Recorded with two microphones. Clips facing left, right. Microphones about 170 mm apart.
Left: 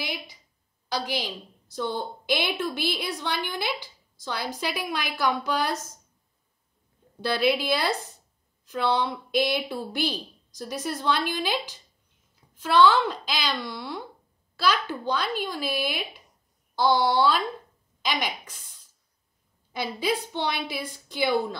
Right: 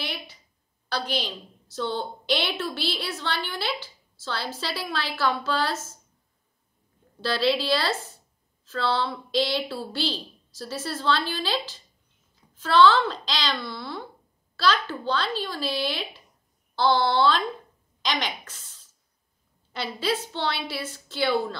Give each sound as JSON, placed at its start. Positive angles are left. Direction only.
{"t": 0.0, "sound": "a sound", "side_deg": 15}
{"t": 0.8, "sound": "a woman's voice", "side_deg": 15}
{"t": 7.2, "sound": "a woman's voice", "side_deg": 15}